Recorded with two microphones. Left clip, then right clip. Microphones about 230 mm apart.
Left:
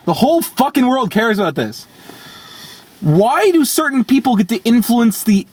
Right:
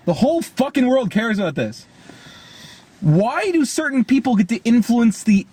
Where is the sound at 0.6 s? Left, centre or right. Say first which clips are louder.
Left 5 dB; centre.